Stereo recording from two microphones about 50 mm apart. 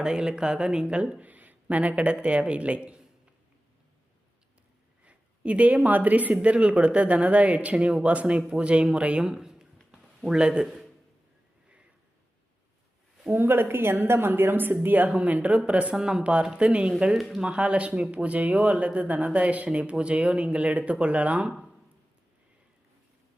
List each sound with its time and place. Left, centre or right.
0.0 s speech: centre
5.0 s a man's voice: right
13.3 s a woman's voice: right
17.2 s speech: centre
17.4 s speech: right